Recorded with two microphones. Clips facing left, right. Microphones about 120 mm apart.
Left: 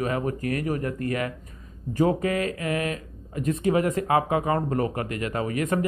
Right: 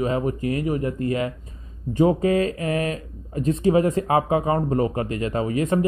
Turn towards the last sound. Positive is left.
turn(degrees=-25)  # may be behind; listen again after turning